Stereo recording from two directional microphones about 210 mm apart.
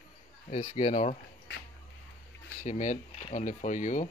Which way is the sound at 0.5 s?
30° left (ahead or behind).